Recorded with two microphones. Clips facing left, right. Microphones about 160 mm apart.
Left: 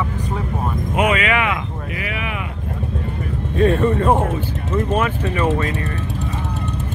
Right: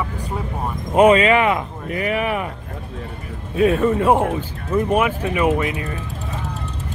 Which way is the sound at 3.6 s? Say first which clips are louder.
Even; 5° right (ahead or behind).